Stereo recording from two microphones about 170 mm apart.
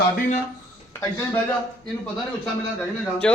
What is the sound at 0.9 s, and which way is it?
Speech, 15° left (ahead or behind).